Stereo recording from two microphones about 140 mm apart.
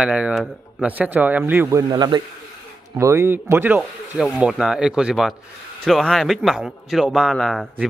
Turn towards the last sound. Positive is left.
turn(degrees=5)  # may be behind; listen again after turning